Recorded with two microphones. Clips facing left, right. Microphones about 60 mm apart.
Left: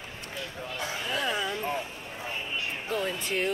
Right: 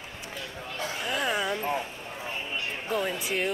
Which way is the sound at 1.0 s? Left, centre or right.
Centre.